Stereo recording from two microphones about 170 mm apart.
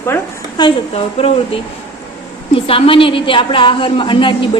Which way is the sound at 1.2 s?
35° left (ahead or behind).